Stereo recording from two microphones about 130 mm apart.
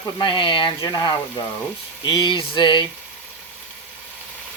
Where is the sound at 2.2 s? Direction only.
40° left (ahead or behind).